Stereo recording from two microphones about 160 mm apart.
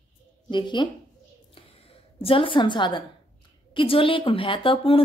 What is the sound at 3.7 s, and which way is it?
A woman's voice, 35° left (ahead or behind).